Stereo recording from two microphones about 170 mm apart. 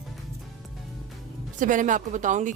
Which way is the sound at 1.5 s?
50° right (ahead or behind).